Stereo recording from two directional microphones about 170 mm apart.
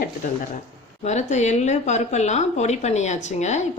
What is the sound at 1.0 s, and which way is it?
Speech, 40° left (ahead or behind).